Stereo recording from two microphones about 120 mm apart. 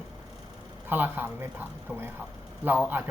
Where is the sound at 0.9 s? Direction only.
15° right (ahead or behind).